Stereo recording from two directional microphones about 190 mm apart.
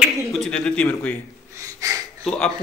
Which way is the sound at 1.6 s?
15° right (ahead or behind).